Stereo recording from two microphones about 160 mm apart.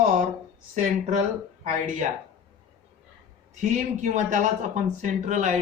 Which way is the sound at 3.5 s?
45° right (ahead or behind).